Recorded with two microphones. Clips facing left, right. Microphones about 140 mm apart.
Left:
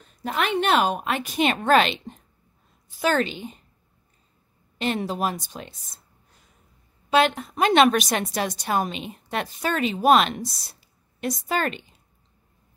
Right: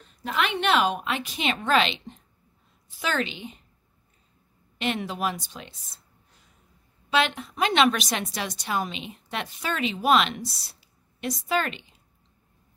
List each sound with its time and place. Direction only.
0.2 s a woman's voice: 40° left (ahead or behind)
4.7 s a woman's voice: 40° left (ahead or behind)
7.1 s a woman's voice: 45° left (ahead or behind)